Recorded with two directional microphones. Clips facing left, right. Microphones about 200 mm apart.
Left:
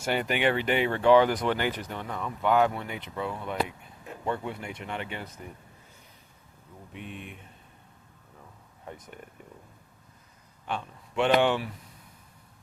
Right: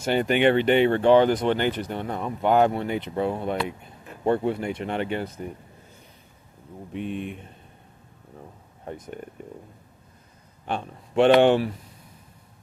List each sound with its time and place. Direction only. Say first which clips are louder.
0.1 s speech: right 7 dB; 25° right (ahead or behind)
6.9 s speech: right 11 dB; 35° right (ahead or behind)
8.4 s a sound: right 7 dB; 35° right (ahead or behind)
10.7 s speech: right 4 dB; 35° right (ahead or behind)